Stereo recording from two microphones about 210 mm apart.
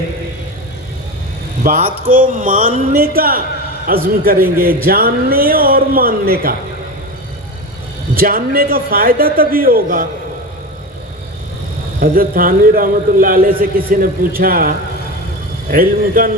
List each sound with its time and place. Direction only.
1.6 s a man's voice: 45° right (ahead or behind)
8.1 s a man's voice: 45° right (ahead or behind)
11.9 s a man's voice: 45° right (ahead or behind)
15.7 s speech: 40° right (ahead or behind)